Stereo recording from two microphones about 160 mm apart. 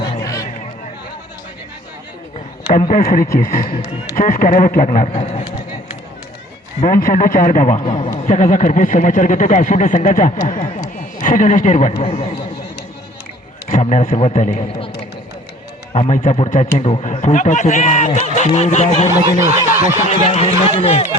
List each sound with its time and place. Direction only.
0.2 s a sound: 20° left (ahead or behind)
2.7 s speech: 60° left (ahead or behind)
5.1 s speech: 45° left (ahead or behind)
6.8 s speech: 60° left (ahead or behind); by 8.1 s 40° left (ahead or behind)
8.3 s speech: 50° left (ahead or behind)
13.7 s speech: 50° left (ahead or behind)
15.9 s speech: 40° left (ahead or behind)